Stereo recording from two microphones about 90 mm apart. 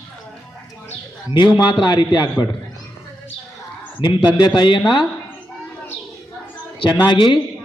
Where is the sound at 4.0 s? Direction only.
60° left (ahead or behind).